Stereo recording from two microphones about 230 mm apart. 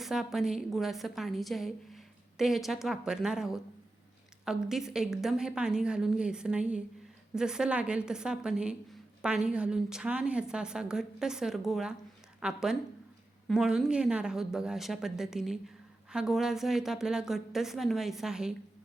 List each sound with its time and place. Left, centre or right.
0.0 s a woman's voice: centre